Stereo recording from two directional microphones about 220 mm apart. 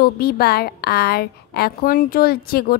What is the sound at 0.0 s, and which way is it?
A woman's voice, 45° left (ahead or behind).